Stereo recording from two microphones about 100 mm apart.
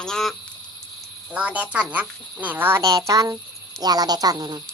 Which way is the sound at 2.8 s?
35° right (ahead or behind).